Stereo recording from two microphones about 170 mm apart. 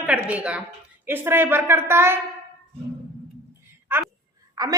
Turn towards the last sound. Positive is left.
turn(degrees=-20)  # may be behind; listen again after turning